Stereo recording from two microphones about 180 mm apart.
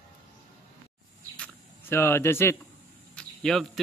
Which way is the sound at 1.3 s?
10° left (ahead or behind).